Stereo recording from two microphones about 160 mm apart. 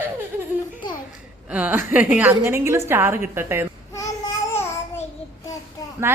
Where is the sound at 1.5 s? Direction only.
10° right (ahead or behind).